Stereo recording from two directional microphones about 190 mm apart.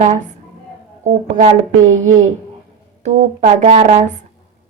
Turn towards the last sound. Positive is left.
turn(degrees=-40)  # may be behind; listen again after turning